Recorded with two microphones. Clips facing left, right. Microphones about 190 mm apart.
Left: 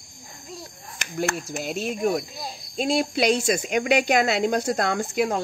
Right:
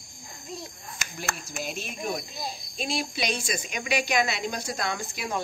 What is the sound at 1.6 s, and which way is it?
Speech, 65° left (ahead or behind).